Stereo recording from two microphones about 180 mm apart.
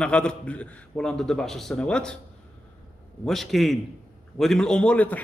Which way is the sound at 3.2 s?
Centre (ahead or behind).